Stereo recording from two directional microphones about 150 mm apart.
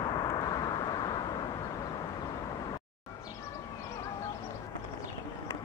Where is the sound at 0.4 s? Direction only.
30° left (ahead or behind).